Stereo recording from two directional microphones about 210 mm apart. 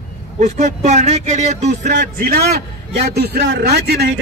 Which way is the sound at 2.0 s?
45° right (ahead or behind).